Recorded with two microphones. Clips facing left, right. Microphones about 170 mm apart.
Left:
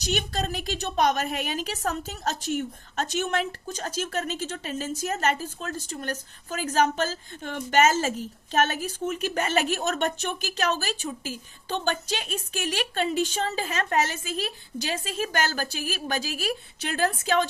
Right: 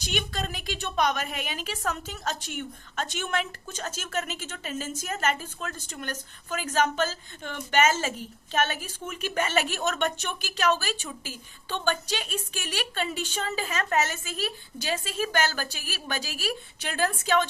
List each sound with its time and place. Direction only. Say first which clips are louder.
0.0 s a woman's voice: left 3 dB; 40° left (ahead or behind)